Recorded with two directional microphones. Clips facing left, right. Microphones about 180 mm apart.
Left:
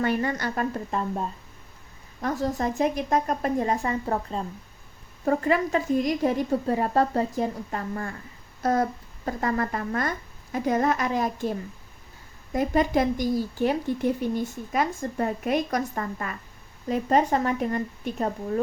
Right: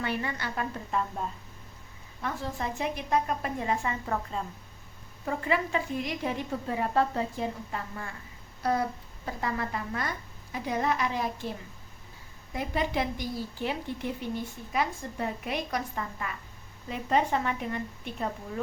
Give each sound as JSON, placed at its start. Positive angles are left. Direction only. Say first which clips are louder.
{"t": 0.0, "sound": "speech", "louder": "left 7 dB", "side_deg": 45}
{"t": 2.2, "sound": "a woman's voice", "louder": "left 7 dB", "side_deg": 40}
{"t": 12.5, "sound": "speech", "louder": "left 7 dB", "side_deg": 45}